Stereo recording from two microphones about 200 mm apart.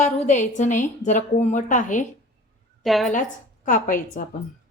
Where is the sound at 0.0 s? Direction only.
35° left (ahead or behind).